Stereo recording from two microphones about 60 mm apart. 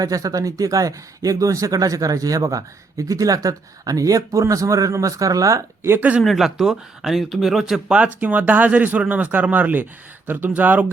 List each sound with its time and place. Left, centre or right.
0.0 s speech: right
6.0 s speech: right
6.2 s speech: centre; by 10.9 s right